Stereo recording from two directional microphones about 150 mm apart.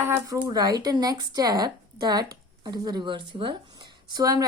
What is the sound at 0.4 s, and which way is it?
A woman's voice, 25° right (ahead or behind).